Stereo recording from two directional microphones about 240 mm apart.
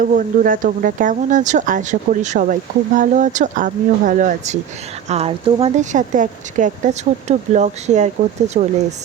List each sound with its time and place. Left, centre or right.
0.0 s speech: right